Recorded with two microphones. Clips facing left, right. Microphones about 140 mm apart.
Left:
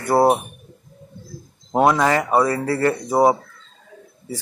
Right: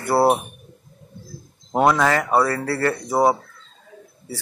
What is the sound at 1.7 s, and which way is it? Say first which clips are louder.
Speech: left 1 dB; 10° left (ahead or behind).